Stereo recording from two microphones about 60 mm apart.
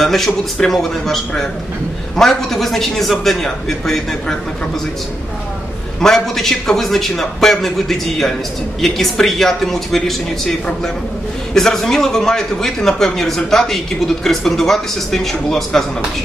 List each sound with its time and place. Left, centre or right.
0.0 s a man's voice: centre
5.9 s a man's voice: centre
11.5 s a man's voice: centre